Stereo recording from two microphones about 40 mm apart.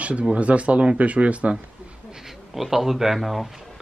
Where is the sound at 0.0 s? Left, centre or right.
Right.